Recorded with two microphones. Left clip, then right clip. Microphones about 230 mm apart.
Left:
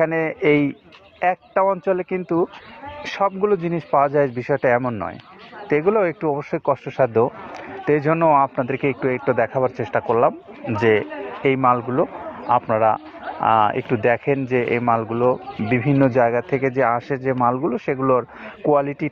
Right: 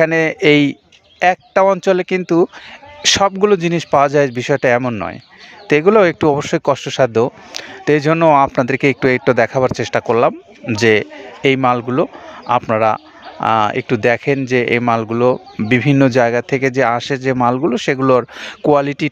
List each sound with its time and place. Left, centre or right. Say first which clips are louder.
0.0 s a man's voice: right 6 dB; right
16.3 s speech: right 4 dB; right